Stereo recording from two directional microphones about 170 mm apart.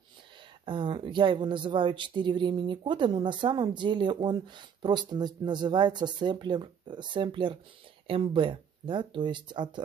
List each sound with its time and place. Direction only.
0.7 s speech: 30° right (ahead or behind)